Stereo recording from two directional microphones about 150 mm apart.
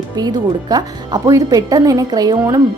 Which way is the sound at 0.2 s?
25° right (ahead or behind).